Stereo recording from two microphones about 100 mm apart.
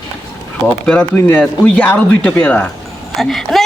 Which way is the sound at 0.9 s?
15° left (ahead or behind).